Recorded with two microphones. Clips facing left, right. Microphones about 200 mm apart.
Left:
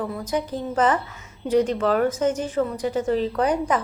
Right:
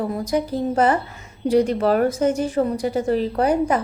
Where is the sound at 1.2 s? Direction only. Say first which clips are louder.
Right 3 dB; 65° right (ahead or behind).